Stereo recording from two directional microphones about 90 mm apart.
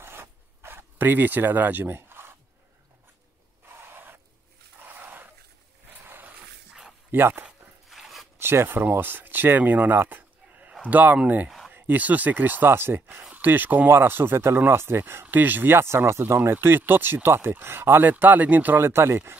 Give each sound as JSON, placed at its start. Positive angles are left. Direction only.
{"t": 0.0, "sound": "zipper", "side_deg": -25}
{"t": 3.6, "sound": "a sound", "side_deg": -25}
{"t": 4.7, "sound": "dog", "side_deg": -20}
{"t": 6.0, "sound": "a sound", "side_deg": -20}
{"t": 7.1, "sound": "speech", "side_deg": -25}
{"t": 7.4, "sound": "dog", "side_deg": 0}
{"t": 8.4, "sound": "speech", "side_deg": -25}
{"t": 11.4, "sound": "a sound", "side_deg": 0}
{"t": 11.7, "sound": "speech", "side_deg": -20}